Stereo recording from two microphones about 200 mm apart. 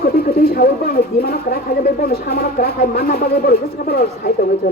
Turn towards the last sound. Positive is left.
turn(degrees=50)  # may be behind; listen again after turning